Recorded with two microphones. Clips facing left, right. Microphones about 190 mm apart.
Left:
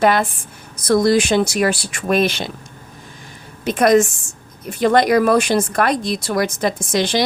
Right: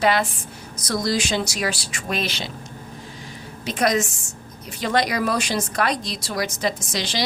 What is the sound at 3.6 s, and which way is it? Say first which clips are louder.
A woman's voice: left 8 dB; 55° left (ahead or behind).